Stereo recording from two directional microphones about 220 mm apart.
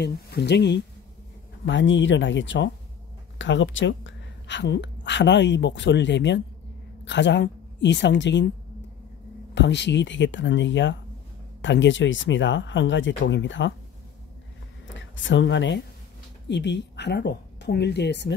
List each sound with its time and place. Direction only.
0.0 s a woman's voice: 50° left (ahead or behind)
9.5 s speech: 55° left (ahead or behind)
15.0 s speech: 55° left (ahead or behind)